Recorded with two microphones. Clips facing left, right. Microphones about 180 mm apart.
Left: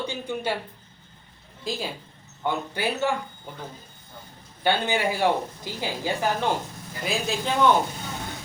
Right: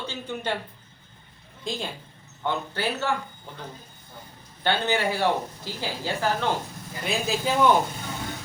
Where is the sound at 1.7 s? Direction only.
5° left (ahead or behind).